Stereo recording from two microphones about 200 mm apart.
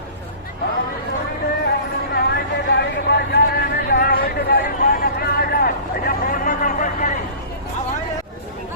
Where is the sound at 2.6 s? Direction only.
55° left (ahead or behind).